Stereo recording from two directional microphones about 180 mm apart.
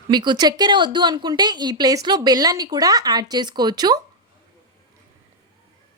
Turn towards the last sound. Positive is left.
turn(degrees=-20)  # may be behind; listen again after turning